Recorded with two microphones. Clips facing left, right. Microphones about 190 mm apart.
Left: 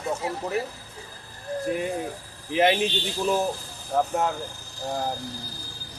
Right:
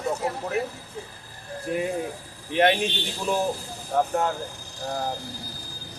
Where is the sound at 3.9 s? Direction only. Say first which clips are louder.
Even; centre (ahead or behind).